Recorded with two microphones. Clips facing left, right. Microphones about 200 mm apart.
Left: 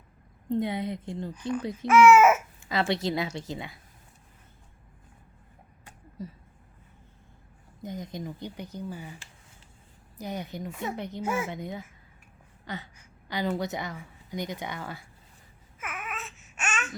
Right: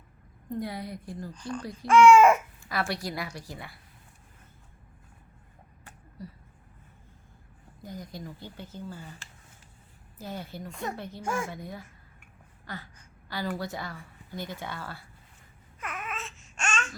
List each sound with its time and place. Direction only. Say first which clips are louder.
0.4 s a woman's voice: left 6 dB; 25° left (ahead or behind)
1.9 s speech: even; 5° left (ahead or behind)
2.6 s a woman's voice: left 4 dB; 20° left (ahead or behind)
5.8 s a sound: left 4 dB; 20° left (ahead or behind)
7.8 s speech: left 4 dB; 20° left (ahead or behind)
10.2 s speech: left 3 dB; 15° left (ahead or behind)
10.7 s speech: even; 5° left (ahead or behind)
10.9 s a woman's voice: left 4 dB; 20° left (ahead or behind)
11.2 s speech: left 2 dB; 5° left (ahead or behind)
11.4 s a woman's voice: left 4 dB; 20° left (ahead or behind)
12.6 s a sound: left 3 dB; 20° left (ahead or behind)
13.0 s a woman's voice: left 4 dB; 20° left (ahead or behind)
15.8 s babbling: right 1 dB; centre (ahead or behind)